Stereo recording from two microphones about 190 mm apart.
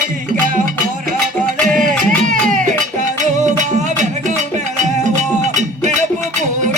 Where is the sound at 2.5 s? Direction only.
45° right (ahead or behind).